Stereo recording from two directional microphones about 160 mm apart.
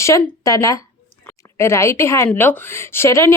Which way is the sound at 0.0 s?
20° left (ahead or behind).